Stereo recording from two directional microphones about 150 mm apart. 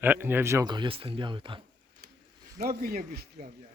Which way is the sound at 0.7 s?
35° right (ahead or behind).